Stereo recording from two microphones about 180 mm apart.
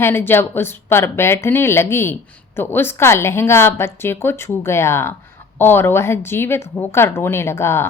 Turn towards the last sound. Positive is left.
turn(degrees=15)  # may be behind; listen again after turning